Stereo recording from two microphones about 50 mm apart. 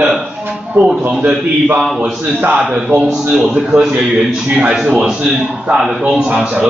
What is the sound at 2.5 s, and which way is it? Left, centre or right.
Speech, centre.